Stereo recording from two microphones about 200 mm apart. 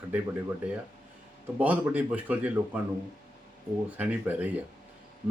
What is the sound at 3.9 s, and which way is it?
Speech, 5° right (ahead or behind).